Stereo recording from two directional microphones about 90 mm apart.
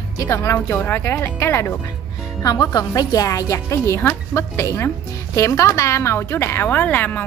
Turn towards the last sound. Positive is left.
turn(degrees=20)  # may be behind; listen again after turning